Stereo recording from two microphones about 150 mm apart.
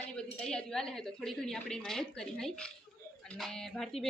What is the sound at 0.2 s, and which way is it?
A woman's voice, 5° left (ahead or behind).